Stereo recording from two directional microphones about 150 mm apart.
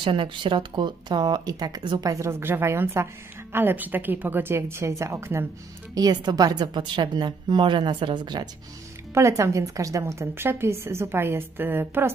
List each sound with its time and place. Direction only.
0.0 s a woman's voice: 35° right (ahead or behind)
9.1 s a woman's voice: 20° right (ahead or behind)